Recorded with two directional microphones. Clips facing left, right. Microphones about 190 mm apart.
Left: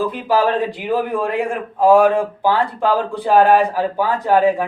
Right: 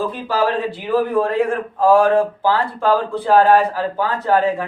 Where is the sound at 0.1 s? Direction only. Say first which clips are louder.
Left 2 dB; 15° left (ahead or behind).